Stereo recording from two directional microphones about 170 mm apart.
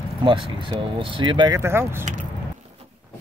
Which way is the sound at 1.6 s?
15° right (ahead or behind).